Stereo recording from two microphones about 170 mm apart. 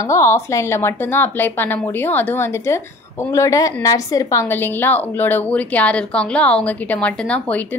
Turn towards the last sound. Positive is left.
turn(degrees=5)  # may be behind; listen again after turning